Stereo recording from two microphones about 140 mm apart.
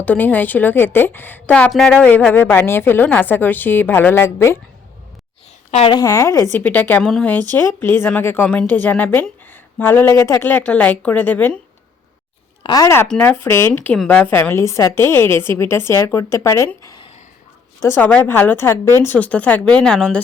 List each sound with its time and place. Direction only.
0.0 s a woman's voice: 10° left (ahead or behind)
5.9 s a woman's voice: 25° left (ahead or behind)
12.6 s a woman's voice: 25° left (ahead or behind); by 20.2 s 5° left (ahead or behind)